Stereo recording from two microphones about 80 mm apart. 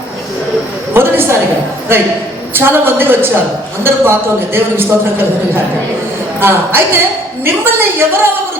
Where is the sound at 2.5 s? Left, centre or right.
Right.